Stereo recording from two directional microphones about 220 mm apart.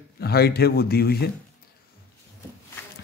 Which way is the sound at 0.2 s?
45° left (ahead or behind).